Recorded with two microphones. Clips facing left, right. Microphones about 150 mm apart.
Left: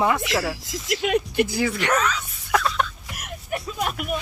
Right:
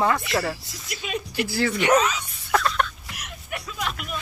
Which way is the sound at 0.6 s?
90° left.